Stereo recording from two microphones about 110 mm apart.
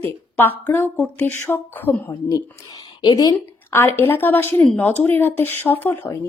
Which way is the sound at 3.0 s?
40° left (ahead or behind).